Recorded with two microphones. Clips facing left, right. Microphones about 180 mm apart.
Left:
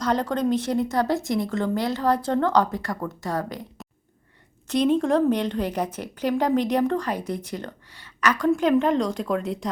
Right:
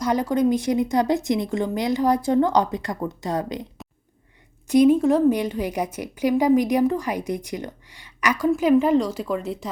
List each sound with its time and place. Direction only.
0.0 s a woman's voice: 10° right (ahead or behind)
4.7 s a woman's voice: 10° right (ahead or behind)